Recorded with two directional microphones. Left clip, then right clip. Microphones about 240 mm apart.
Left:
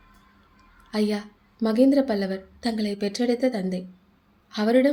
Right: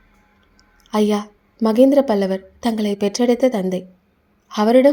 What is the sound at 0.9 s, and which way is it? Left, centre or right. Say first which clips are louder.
A woman's voice: right 8 dB; right.